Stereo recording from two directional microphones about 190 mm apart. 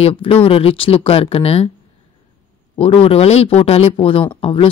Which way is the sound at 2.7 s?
30° left (ahead or behind).